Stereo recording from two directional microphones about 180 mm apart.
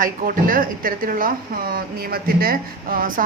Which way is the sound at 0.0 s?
50° right (ahead or behind).